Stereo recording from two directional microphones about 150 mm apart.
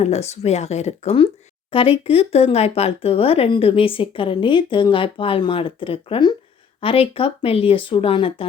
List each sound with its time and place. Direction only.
0.0 s speech: 45° left (ahead or behind)